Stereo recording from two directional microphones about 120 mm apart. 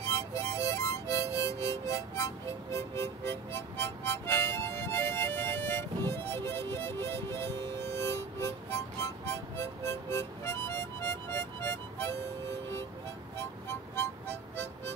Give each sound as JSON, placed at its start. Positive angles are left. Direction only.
{"t": 0.0, "sound": "harmonica", "side_deg": 25}
{"t": 13.4, "sound": "music", "side_deg": 20}